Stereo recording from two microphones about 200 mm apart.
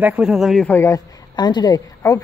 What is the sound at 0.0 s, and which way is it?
Speech, 5° right (ahead or behind).